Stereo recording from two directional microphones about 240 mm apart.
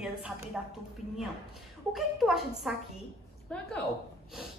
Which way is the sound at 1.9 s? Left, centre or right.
Centre.